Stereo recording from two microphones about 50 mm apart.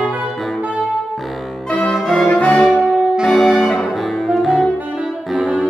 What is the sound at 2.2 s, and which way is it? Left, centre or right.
Brass instrument, left.